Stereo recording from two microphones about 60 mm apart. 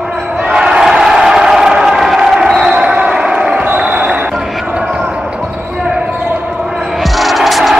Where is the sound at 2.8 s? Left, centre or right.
Centre.